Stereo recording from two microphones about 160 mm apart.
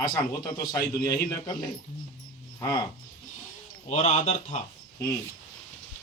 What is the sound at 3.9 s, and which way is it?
Speech, 45° left (ahead or behind).